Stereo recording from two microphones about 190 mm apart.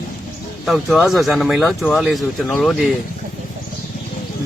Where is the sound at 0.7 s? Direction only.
Centre (ahead or behind).